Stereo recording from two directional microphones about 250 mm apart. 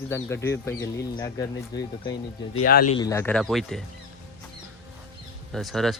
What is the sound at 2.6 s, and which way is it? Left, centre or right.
Speech, left.